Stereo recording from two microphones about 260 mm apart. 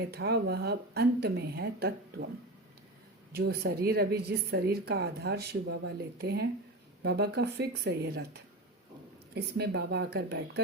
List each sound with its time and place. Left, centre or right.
0.0 s a woman's voice: right
3.3 s a woman's voice: right
9.3 s a woman's voice: right